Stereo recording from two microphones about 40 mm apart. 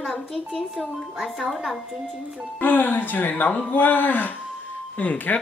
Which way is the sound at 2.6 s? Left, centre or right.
Left.